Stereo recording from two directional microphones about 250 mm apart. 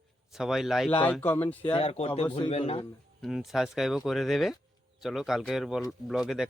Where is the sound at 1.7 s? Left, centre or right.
Left.